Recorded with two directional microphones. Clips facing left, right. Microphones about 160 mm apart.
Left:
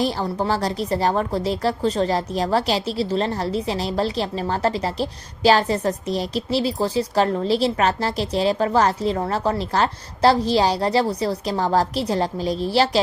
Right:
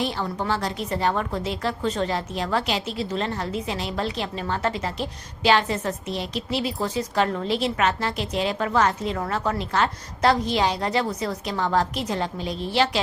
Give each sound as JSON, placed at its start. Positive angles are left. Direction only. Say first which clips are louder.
{"t": 0.0, "sound": "a woman's voice", "louder": "left 4 dB", "side_deg": 35}